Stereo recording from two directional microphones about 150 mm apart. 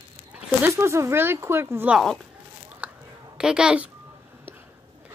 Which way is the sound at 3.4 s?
5° right (ahead or behind).